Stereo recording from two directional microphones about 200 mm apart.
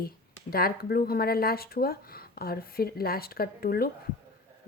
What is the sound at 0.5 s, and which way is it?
Speech, 50° left (ahead or behind).